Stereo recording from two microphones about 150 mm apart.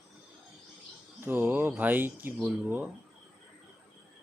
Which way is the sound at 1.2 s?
15° right (ahead or behind).